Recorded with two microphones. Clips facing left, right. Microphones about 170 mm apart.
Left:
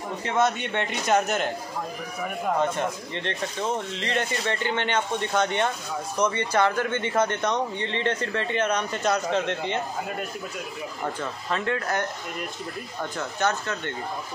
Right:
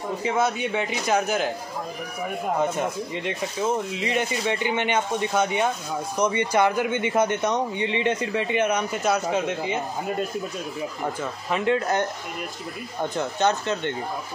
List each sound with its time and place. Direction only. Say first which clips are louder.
0.2 s a man's voice: even; 5° right (ahead or behind)
2.6 s a man's voice: right 1 dB; 10° right (ahead or behind)
11.1 s speech: right 2 dB; 15° right (ahead or behind)
13.1 s speech: right 3 dB; 20° right (ahead or behind)